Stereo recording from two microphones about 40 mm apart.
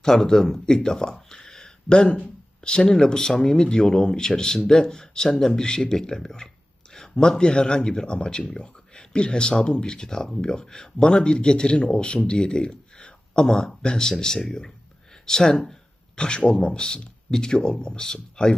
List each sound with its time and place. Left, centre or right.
0.0 s speech: centre
1.3 s a sound: centre
2.6 s speech: left
16.1 s speech: left